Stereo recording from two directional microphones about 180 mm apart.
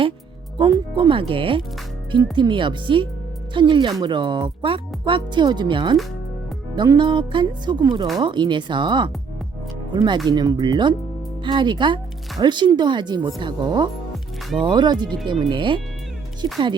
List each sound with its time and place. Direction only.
0.6 s speech: 25° right (ahead or behind)